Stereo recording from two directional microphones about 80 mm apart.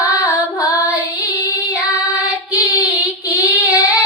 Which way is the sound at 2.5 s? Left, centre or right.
Left.